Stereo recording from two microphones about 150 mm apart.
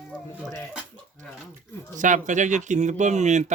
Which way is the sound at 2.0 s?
55° right (ahead or behind).